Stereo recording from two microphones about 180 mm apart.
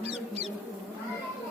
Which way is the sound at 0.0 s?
35° right (ahead or behind).